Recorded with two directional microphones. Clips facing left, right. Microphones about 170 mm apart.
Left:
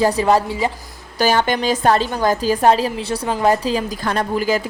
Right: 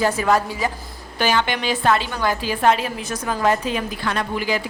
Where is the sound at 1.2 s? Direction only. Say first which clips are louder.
Left 4 dB; 40° left (ahead or behind).